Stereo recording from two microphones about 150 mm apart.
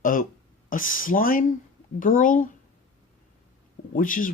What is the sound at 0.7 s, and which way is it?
Speech, 65° left (ahead or behind).